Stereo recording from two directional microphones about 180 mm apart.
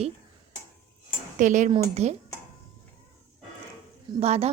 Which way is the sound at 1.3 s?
45° right (ahead or behind).